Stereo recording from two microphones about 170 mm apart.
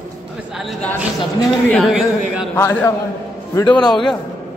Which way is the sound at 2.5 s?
15° left (ahead or behind).